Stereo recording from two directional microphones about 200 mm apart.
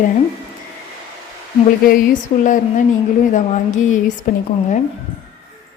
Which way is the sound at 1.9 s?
40° left (ahead or behind).